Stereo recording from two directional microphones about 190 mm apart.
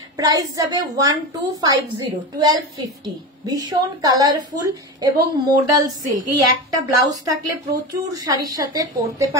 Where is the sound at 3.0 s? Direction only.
20° right (ahead or behind).